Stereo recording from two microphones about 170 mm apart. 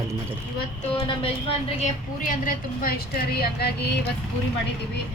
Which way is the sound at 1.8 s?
55° left (ahead or behind).